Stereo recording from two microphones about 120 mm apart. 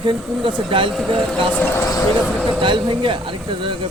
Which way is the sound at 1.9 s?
30° left (ahead or behind).